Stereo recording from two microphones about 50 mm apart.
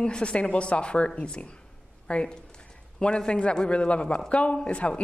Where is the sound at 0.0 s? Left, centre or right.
Left.